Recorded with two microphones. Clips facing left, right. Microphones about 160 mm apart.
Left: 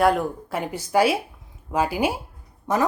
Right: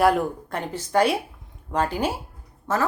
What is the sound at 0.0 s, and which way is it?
Speech, centre (ahead or behind).